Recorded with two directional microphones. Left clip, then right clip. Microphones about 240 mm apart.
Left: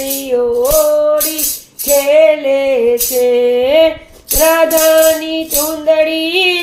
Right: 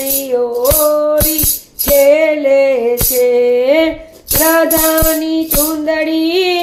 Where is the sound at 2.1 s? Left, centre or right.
Right.